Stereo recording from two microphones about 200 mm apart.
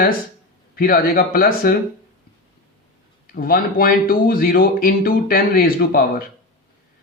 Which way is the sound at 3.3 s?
45° left (ahead or behind).